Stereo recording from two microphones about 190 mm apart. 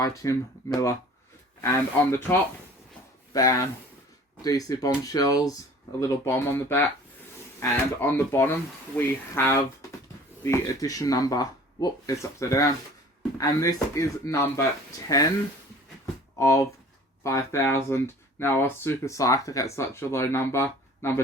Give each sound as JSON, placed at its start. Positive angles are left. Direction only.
{"t": 0.0, "sound": "speech", "side_deg": 20}
{"t": 16.4, "sound": "speech", "side_deg": 15}